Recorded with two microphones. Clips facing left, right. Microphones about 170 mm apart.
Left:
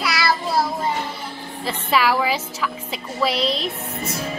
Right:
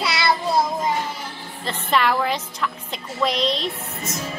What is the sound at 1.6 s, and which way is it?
A woman's voice, 5° left (ahead or behind).